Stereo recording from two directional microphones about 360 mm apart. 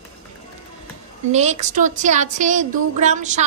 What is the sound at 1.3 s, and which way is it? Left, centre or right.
Speech, centre.